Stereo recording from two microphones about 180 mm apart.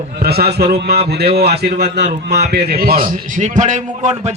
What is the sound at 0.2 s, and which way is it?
A man's voice, 60° right (ahead or behind).